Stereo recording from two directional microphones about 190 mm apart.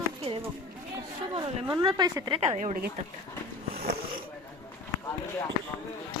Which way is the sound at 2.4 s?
40° right (ahead or behind).